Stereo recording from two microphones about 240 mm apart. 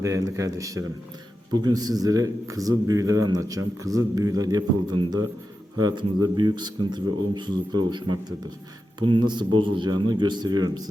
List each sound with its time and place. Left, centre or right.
0.0 s a man's voice: centre